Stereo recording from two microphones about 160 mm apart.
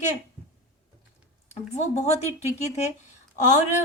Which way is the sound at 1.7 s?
40° left (ahead or behind).